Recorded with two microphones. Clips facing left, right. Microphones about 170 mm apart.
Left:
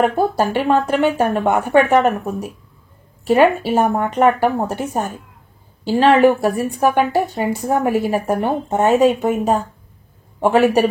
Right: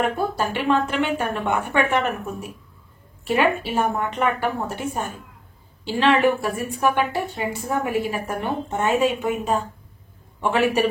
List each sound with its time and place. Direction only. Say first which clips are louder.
0.0 s a woman's voice: left 6 dB; 40° left (ahead or behind)